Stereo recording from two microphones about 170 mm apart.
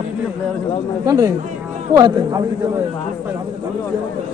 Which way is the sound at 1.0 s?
20° right (ahead or behind).